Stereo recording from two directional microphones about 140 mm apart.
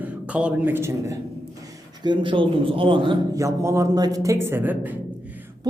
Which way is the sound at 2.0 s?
35° right (ahead or behind).